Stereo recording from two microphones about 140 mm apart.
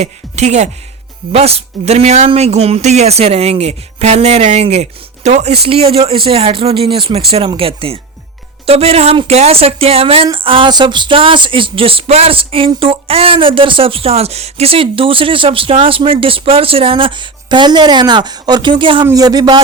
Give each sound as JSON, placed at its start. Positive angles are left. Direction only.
{"t": 0.0, "sound": "speech", "side_deg": -50}
{"t": 10.3, "sound": "a sound", "side_deg": -40}
{"t": 19.0, "sound": "speech", "side_deg": -25}